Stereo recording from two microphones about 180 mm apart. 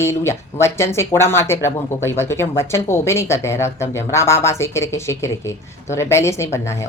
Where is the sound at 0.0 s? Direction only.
15° left (ahead or behind).